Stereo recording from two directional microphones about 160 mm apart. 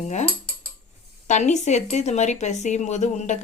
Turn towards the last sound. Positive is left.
turn(degrees=45)  # may be behind; listen again after turning